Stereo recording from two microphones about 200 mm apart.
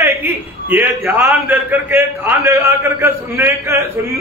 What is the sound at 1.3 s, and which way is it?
A man's voice, 10° right (ahead or behind).